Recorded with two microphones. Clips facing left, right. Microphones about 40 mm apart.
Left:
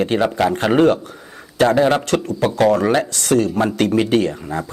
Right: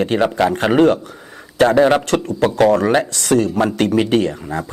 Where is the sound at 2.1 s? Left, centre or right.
Right.